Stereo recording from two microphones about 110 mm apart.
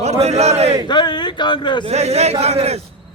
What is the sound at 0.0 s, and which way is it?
Speech, 80° right.